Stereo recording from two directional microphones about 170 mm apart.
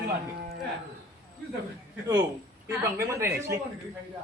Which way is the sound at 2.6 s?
15° right (ahead or behind).